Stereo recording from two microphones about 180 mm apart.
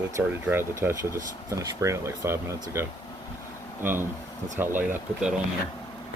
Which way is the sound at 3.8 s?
10° right (ahead or behind).